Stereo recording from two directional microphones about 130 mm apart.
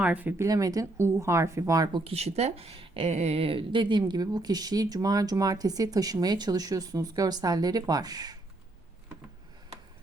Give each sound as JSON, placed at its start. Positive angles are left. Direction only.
{"t": 0.0, "sound": "speech", "side_deg": -10}
{"t": 0.4, "sound": "a woman's voice", "side_deg": -25}
{"t": 2.0, "sound": "a woman's voice", "side_deg": -55}